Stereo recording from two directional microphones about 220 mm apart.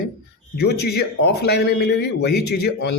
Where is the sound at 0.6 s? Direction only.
50° left (ahead or behind).